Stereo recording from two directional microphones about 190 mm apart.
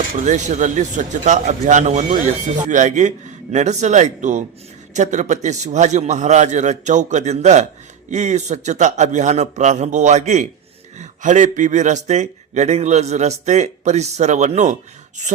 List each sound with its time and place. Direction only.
0.2 s speech: 40° right (ahead or behind)